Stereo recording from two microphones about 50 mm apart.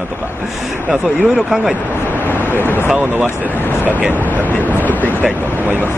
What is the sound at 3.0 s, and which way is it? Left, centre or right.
Speech, right.